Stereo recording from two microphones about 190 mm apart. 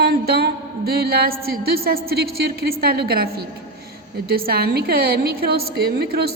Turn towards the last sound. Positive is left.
turn(degrees=-55)  # may be behind; listen again after turning